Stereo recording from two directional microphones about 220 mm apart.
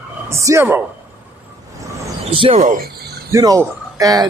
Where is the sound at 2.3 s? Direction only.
25° right (ahead or behind).